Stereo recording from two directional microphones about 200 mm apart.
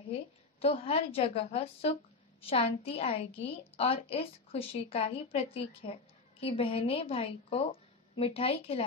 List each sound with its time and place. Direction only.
0.1 s a woman's voice: 30° left (ahead or behind)